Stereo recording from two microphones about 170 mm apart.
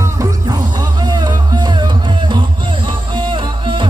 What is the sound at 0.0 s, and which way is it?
Music, 20° right (ahead or behind).